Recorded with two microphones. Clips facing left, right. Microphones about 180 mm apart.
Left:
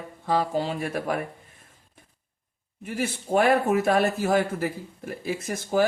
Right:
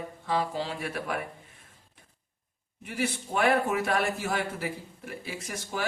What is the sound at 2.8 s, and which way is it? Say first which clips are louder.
A man's voice: left 3 dB; 45° left (ahead or behind).